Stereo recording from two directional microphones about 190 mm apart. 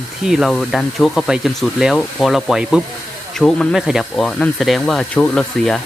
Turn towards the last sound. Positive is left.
turn(degrees=5)  # may be behind; listen again after turning